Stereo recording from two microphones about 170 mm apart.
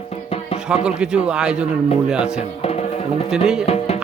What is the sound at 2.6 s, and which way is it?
Music, 35° left (ahead or behind).